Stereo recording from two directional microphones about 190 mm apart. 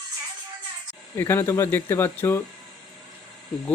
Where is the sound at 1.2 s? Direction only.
15° left (ahead or behind).